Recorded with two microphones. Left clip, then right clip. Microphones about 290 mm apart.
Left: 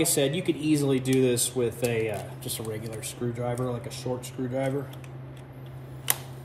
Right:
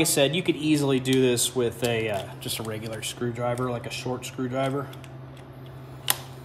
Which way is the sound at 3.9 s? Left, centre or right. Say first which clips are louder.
Right 2 dB; centre.